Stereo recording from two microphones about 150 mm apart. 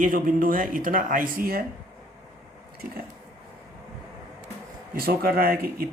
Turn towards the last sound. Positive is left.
turn(degrees=-85)